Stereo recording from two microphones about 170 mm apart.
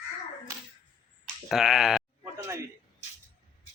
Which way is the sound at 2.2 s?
15° right (ahead or behind).